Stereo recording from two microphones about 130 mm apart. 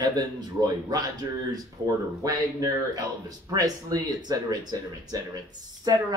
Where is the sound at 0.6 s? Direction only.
30° right (ahead or behind).